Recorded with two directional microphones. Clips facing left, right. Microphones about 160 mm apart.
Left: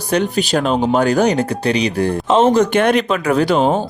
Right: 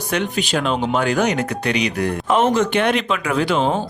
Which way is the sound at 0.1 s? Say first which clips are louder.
Left 5 dB; 35° left (ahead or behind).